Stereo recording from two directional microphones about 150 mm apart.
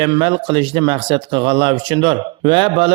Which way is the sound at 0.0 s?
35° right (ahead or behind).